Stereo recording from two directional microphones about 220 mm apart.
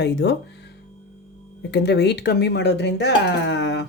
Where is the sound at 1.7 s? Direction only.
50° left (ahead or behind).